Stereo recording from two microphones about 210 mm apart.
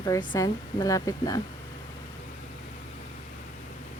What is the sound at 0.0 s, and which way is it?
Speech, 15° left (ahead or behind).